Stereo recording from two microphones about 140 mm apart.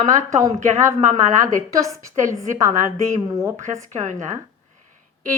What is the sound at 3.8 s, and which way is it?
Speech, 60° right (ahead or behind).